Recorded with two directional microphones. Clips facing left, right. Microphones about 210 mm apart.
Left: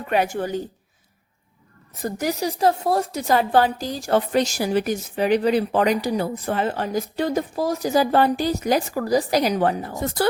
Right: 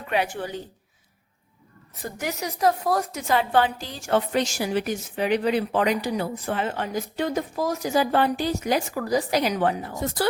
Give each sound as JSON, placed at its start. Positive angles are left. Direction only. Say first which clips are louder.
{"t": 0.1, "sound": "a woman's voice", "louder": "left 4 dB", "side_deg": 45}
{"t": 2.0, "sound": "a woman's voice", "louder": "left 6 dB", "side_deg": 40}